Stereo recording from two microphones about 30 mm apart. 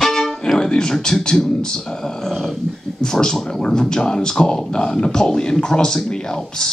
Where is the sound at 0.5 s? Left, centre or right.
Left.